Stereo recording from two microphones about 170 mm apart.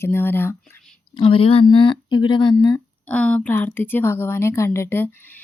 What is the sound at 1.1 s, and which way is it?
Speech, 30° left (ahead or behind).